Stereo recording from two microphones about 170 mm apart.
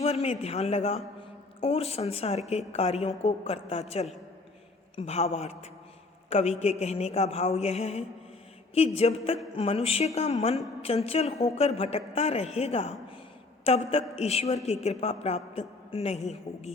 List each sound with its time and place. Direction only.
0.0 s a man's voice: 40° left (ahead or behind)